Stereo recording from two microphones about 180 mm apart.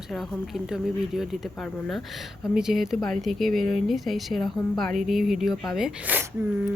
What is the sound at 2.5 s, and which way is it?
Speech, centre (ahead or behind).